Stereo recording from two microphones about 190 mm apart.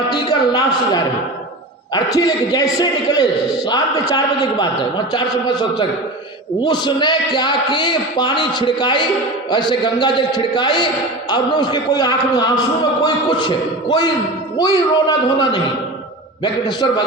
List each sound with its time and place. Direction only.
0.1 s a man's voice: 20° left (ahead or behind)